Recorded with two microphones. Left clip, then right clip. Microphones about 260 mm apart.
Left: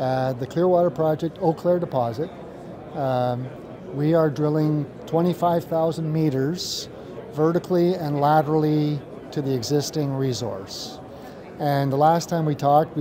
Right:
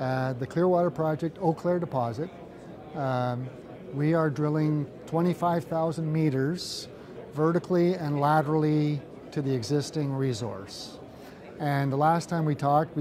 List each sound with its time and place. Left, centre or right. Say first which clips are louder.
0.0 s speech: left 6 dB; right